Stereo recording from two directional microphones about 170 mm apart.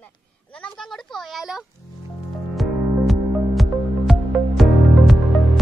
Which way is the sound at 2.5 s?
Centre (ahead or behind).